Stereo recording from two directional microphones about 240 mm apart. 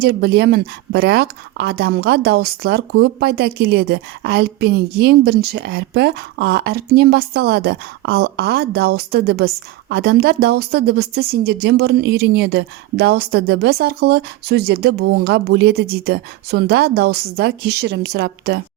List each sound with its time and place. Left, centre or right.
0.0 s a woman's voice: right